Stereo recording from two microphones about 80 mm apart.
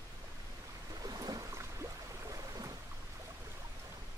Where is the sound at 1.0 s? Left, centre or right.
Right.